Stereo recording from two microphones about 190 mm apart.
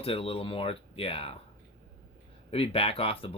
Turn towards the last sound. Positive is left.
turn(degrees=30)  # may be behind; listen again after turning